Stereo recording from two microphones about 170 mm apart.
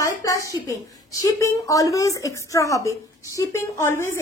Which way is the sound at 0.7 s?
20° left (ahead or behind).